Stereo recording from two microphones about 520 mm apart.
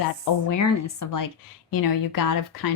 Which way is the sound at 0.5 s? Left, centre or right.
Left.